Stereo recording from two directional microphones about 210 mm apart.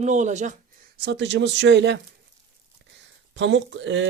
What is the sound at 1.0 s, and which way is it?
Speech, 55° right (ahead or behind).